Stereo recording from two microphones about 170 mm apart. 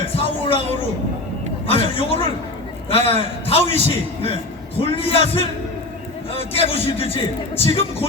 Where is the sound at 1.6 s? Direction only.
30° left (ahead or behind).